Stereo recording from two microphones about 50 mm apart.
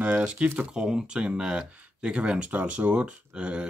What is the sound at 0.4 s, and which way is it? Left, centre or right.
Speech, centre.